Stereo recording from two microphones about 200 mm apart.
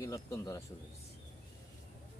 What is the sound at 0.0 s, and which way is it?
Speech, 15° left (ahead or behind).